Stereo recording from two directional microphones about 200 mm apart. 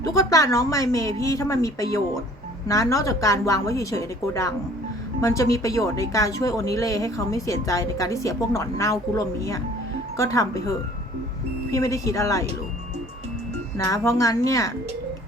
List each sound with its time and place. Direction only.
0.0 s a woman's voice: 15° left (ahead or behind)
13.7 s a woman's voice: 15° left (ahead or behind)